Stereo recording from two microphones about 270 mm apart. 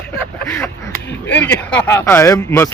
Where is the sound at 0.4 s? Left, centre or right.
Centre.